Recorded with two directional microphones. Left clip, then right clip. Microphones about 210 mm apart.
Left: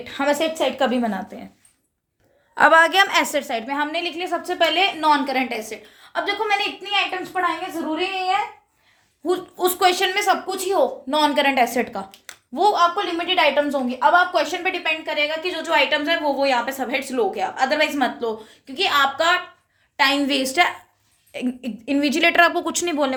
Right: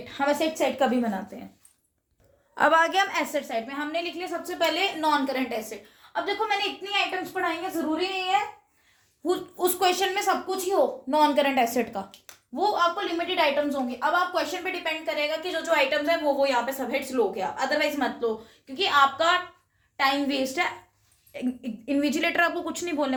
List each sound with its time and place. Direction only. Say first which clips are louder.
0.0 s a woman's voice: left 4 dB; 55° left (ahead or behind)
0.6 s speech: left 4 dB; 30° left (ahead or behind)
2.6 s a woman's voice: left 7 dB; 15° left (ahead or behind)
3.1 s a woman's voice: left 8 dB; 35° left (ahead or behind)
3.4 s a woman's voice: left 7 dB; 55° left (ahead or behind)
9.2 s speech: left 4 dB; 10° left (ahead or behind)
12.5 s a woman's voice: left 6 dB; 45° left (ahead or behind)
21.3 s a woman's voice: left 5 dB; 40° left (ahead or behind)